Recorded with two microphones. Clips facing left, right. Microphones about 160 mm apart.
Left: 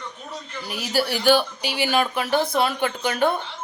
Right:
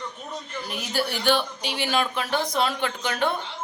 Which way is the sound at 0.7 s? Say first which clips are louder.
Left 4 dB; 5° left (ahead or behind).